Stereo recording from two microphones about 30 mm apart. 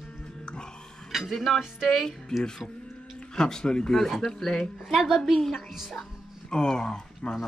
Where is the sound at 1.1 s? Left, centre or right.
Centre.